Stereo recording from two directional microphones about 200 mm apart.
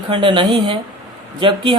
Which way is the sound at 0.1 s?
25° right (ahead or behind).